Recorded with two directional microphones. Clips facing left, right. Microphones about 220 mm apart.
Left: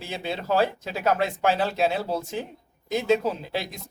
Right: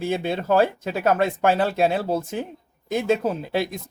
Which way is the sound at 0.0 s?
50° right (ahead or behind).